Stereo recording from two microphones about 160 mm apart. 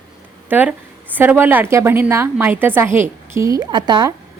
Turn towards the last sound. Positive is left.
turn(degrees=-25)  # may be behind; listen again after turning